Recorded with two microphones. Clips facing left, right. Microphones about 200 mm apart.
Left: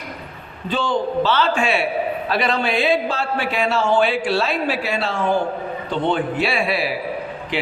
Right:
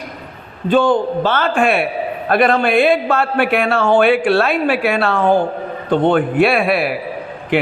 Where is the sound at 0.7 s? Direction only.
55° right (ahead or behind).